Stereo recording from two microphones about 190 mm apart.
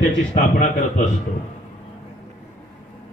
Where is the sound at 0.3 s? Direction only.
40° left (ahead or behind).